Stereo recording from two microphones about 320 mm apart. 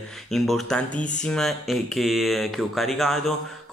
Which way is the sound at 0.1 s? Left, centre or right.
Centre.